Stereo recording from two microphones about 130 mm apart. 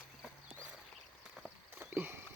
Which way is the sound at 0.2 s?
5° right (ahead or behind).